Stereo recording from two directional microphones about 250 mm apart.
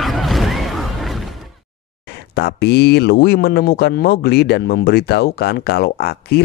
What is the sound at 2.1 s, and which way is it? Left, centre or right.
Speech, left.